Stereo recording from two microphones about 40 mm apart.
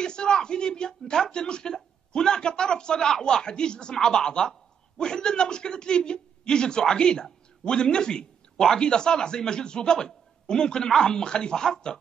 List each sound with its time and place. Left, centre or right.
0.0 s speech: centre